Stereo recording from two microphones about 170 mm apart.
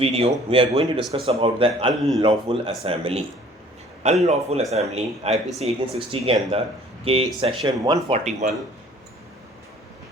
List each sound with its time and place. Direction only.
0.0 s speech: 35° right (ahead or behind)
1.9 s a man's voice: centre (ahead or behind)
2.2 s speech: 35° right (ahead or behind)
8.1 s speech: 45° right (ahead or behind)